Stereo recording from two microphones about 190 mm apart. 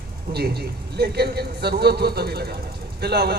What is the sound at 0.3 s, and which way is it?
A man's voice, 60° right (ahead or behind).